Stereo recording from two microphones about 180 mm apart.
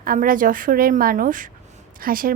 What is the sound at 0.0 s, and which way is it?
A woman's voice, 50° right (ahead or behind).